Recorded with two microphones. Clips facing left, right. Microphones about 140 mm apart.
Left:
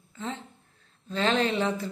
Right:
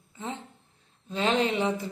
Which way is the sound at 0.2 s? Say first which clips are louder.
Left 1 dB; 15° right (ahead or behind).